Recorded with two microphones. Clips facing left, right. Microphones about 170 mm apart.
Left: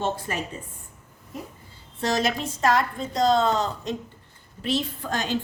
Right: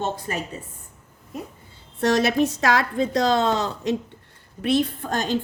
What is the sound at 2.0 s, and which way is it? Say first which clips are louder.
Speech: right 6 dB; 65° right (ahead or behind).